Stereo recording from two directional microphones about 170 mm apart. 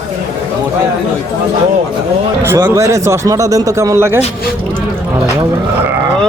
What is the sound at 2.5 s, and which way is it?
Speech, 15° right (ahead or behind).